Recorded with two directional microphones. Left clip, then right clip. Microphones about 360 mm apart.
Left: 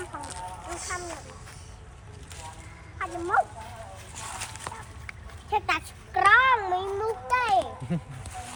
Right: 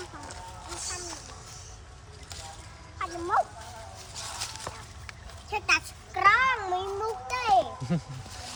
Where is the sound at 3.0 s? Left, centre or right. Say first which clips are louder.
Left 2 dB; centre.